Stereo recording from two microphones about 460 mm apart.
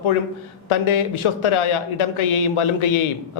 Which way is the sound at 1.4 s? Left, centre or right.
Left.